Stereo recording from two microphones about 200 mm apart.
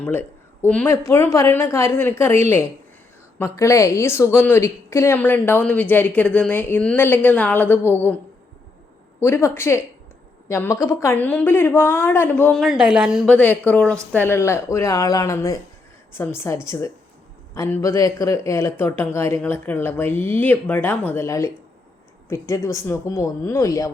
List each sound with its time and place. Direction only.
0.0 s a woman's voice: 10° left (ahead or behind)
9.2 s a woman's voice: 10° left (ahead or behind)